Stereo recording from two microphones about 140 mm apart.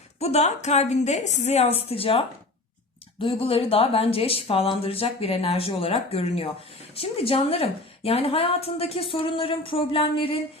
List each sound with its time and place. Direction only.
0.2 s a woman's voice: 50° left (ahead or behind)